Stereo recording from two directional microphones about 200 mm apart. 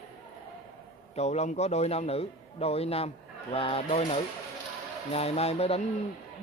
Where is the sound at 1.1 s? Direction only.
35° left (ahead or behind).